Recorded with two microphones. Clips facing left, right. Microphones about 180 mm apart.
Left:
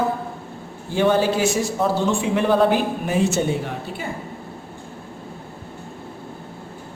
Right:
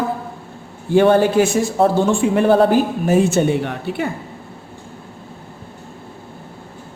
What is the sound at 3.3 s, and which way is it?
Speech, 65° right (ahead or behind).